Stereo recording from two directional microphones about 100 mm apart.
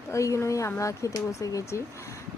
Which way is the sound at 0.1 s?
30° left (ahead or behind).